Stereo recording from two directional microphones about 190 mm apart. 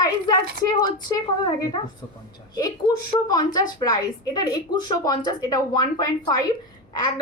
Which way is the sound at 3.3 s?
20° left (ahead or behind).